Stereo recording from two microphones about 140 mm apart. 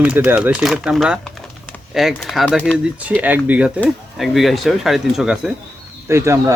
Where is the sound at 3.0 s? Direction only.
10° right (ahead or behind).